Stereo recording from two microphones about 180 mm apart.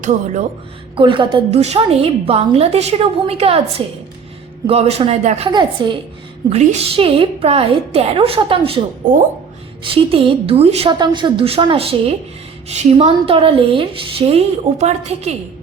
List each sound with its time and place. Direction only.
0.9 s a woman's voice: 30° right (ahead or behind)
5.5 s a woman's voice: 25° right (ahead or behind)
6.5 s a woman's voice: 40° right (ahead or behind)
9.8 s a woman's voice: 30° right (ahead or behind)